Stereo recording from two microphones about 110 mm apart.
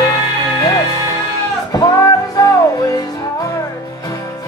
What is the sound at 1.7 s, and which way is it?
Music, 35° left (ahead or behind).